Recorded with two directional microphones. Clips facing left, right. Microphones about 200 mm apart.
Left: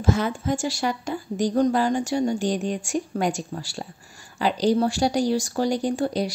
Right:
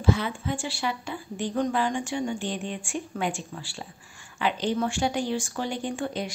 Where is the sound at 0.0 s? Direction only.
45° left (ahead or behind).